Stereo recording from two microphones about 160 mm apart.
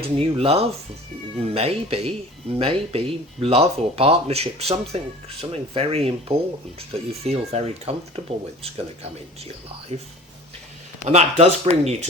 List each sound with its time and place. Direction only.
0.2 s speech: 40° right (ahead or behind)
11.0 s speech: 45° right (ahead or behind)